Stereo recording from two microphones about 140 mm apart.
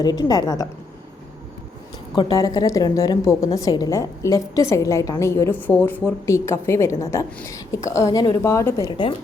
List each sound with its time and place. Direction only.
0.0 s a woman's voice: 30° left (ahead or behind)
2.3 s a woman's voice: 30° left (ahead or behind)